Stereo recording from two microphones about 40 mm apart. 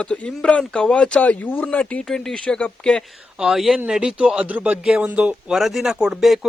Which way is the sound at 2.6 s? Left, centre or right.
Left.